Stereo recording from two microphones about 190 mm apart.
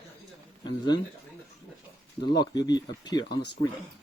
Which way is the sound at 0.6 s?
25° left (ahead or behind).